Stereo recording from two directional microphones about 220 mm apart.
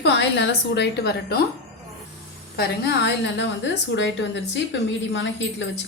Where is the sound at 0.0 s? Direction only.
50° left (ahead or behind).